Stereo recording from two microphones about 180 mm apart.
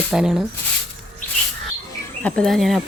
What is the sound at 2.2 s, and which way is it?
Speech, 5° left (ahead or behind).